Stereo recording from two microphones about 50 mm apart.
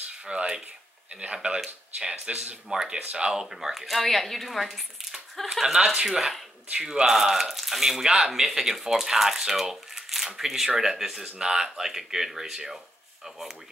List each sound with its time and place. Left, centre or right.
0.3 s speech: right